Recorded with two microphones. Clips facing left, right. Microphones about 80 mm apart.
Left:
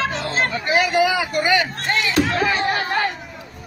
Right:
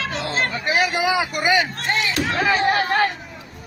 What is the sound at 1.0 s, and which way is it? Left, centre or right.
Speech, centre.